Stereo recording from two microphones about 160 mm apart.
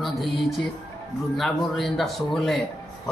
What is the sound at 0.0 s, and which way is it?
Music, centre (ahead or behind).